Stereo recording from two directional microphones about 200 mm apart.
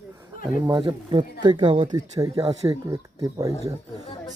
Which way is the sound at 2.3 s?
30° right (ahead or behind).